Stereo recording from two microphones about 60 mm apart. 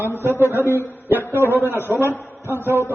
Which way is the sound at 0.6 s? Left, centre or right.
Right.